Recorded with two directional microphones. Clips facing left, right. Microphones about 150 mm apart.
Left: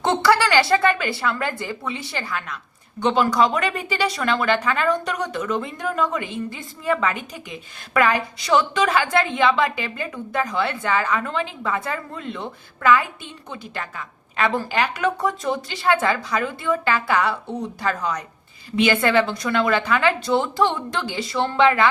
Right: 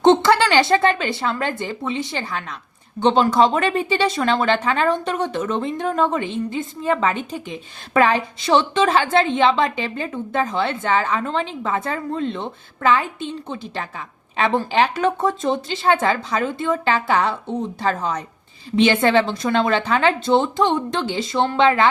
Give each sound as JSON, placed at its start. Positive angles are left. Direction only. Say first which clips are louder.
{"t": 0.0, "sound": "a woman's voice", "louder": "right 4 dB", "side_deg": -20}